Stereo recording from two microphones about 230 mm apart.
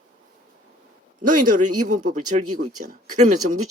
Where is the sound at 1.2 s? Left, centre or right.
Right.